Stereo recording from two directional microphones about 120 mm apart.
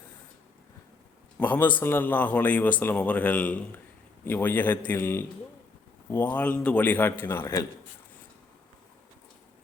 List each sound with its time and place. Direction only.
1.4 s a man's voice: 15° left (ahead or behind)